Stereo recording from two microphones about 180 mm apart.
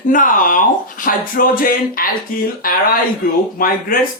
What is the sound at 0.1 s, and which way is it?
Speech, 45° left (ahead or behind).